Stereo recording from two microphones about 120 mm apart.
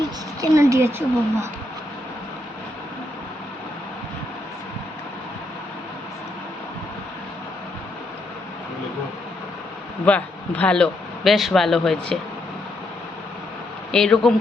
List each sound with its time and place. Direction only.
0.5 s speech: 25° right (ahead or behind)
10.1 s speech: 10° left (ahead or behind)
13.9 s speech: 5° left (ahead or behind)